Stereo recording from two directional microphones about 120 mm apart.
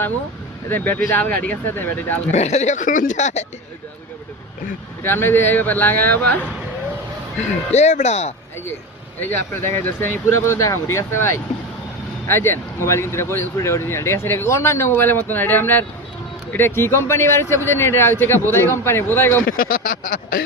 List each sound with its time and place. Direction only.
0.7 s speech: 15° left (ahead or behind)
2.3 s speech: 70° left (ahead or behind)
5.0 s speech: 20° left (ahead or behind)
7.7 s speech: 70° left (ahead or behind)
9.2 s speech: 15° left (ahead or behind)
19.8 s speech: 90° left